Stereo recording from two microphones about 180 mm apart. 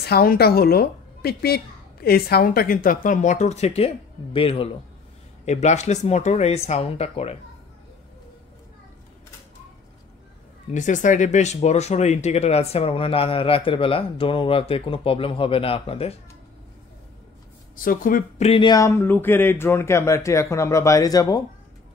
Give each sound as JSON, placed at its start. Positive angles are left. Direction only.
{"t": 0.0, "sound": "a woman's voice", "side_deg": 60}
{"t": 10.7, "sound": "speech", "side_deg": 45}
{"t": 17.7, "sound": "a woman's voice", "side_deg": 50}
{"t": 18.4, "sound": "speech", "side_deg": 30}